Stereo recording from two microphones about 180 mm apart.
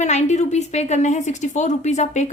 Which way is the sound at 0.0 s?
40° left (ahead or behind).